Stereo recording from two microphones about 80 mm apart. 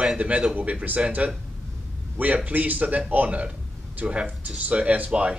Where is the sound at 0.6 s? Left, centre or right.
Centre.